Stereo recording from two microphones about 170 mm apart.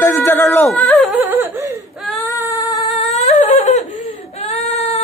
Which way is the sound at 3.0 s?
40° left (ahead or behind).